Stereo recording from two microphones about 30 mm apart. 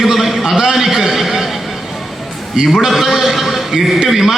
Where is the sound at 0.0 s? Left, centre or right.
Centre.